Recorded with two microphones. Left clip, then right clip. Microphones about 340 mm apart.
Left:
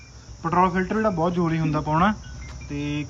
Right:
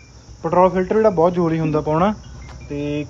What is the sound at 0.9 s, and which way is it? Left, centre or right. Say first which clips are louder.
Speech: right 8 dB; right.